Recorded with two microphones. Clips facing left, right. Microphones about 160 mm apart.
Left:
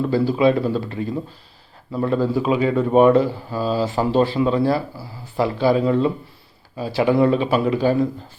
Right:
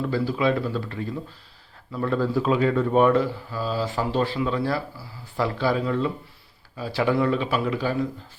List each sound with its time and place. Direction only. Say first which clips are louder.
0.0 s speech: left 6 dB; 25° left (ahead or behind)
2.0 s a man's voice: left 3 dB; 15° left (ahead or behind)
2.9 s speech: left 8 dB; 20° left (ahead or behind)